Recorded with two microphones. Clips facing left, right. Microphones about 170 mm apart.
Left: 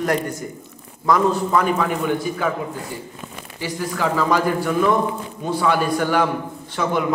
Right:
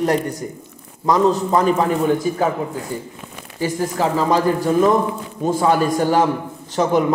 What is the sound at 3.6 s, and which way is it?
Speech, 45° right (ahead or behind).